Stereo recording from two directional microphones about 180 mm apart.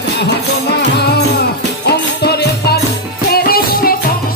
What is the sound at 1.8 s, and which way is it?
Music, 65° left (ahead or behind).